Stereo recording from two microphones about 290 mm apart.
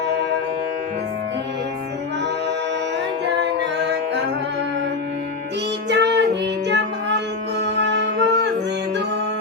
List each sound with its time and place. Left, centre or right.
3.4 s music: right
5.9 s child singing: right
7.6 s music: right